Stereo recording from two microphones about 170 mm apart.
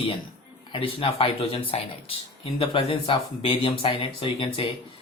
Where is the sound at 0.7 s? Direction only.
30° left (ahead or behind).